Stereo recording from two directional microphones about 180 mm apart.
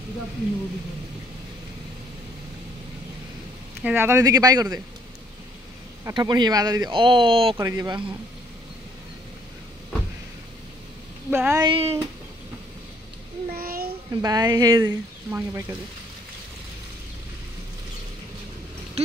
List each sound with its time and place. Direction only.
3.8 s speech: 10° right (ahead or behind)
6.0 s speech: 25° right (ahead or behind)
7.5 s speech: 20° right (ahead or behind)
11.2 s speech: 10° right (ahead or behind)
11.6 s speech: 30° right (ahead or behind)
13.5 s child singing: 55° right (ahead or behind)
14.2 s speech: 20° right (ahead or behind)